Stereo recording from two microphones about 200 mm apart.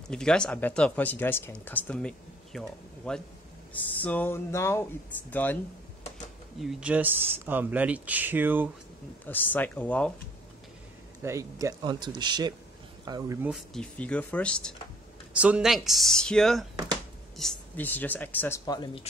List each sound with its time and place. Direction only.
0.1 s speech: 5° left (ahead or behind)
6.6 s speech: 5° right (ahead or behind)
9.2 s speech: 10° left (ahead or behind)
11.2 s speech: 15° right (ahead or behind)
13.5 s speech: 5° left (ahead or behind); by 19.0 s 20° left (ahead or behind)